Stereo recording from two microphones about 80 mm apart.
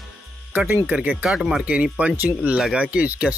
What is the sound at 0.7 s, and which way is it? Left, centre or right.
Speech, right.